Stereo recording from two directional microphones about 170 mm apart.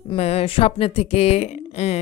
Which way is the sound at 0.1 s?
35° left (ahead or behind).